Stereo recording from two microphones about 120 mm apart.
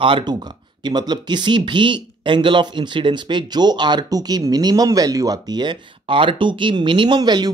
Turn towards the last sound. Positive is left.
turn(degrees=-35)  # may be behind; listen again after turning